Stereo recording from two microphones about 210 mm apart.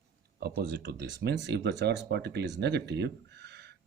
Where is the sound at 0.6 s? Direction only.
50° right (ahead or behind).